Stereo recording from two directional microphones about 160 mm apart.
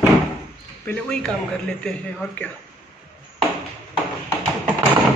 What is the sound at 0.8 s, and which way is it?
Speech, 5° left (ahead or behind).